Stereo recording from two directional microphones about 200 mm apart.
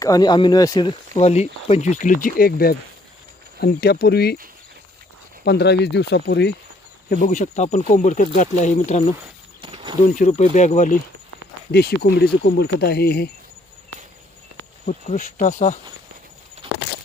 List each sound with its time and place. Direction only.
0.0 s speech: 20° left (ahead or behind); by 4.4 s 55° left (ahead or behind)
5.5 s speech: 55° left (ahead or behind)
7.1 s speech: 40° left (ahead or behind)
9.6 s a sound: 25° right (ahead or behind)
10.1 s speech: 40° left (ahead or behind)
11.7 s speech: 55° left (ahead or behind)
14.8 s speech: 40° left (ahead or behind)
16.6 s a sound: 25° right (ahead or behind)